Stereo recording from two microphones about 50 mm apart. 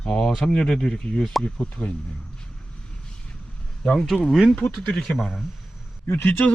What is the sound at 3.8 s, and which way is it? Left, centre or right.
Speech, centre.